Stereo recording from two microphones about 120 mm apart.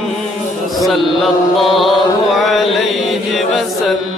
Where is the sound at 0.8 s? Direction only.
Centre (ahead or behind).